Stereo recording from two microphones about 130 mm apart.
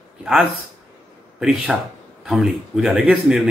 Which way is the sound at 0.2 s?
10° right (ahead or behind).